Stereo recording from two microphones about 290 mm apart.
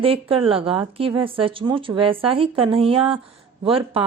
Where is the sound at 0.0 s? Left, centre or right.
Centre.